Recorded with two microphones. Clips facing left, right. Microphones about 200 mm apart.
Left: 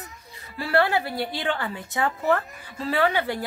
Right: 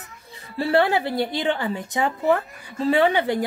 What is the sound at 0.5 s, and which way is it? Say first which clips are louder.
A woman's voice: right 3 dB; 25° right (ahead or behind).